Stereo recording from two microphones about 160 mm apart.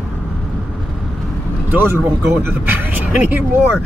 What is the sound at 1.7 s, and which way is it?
Speech, 15° right (ahead or behind).